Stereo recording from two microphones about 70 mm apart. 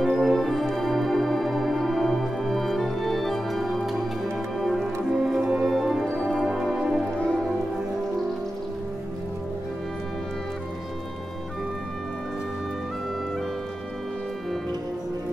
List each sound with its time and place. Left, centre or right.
0.0 s music: centre
7.2 s music: centre